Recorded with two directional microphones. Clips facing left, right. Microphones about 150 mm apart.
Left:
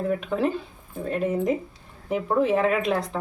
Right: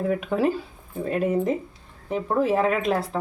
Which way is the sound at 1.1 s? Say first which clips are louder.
Right 1 dB; 5° right (ahead or behind).